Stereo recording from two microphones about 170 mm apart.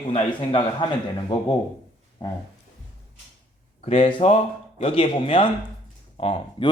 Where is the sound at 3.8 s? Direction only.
30° left (ahead or behind).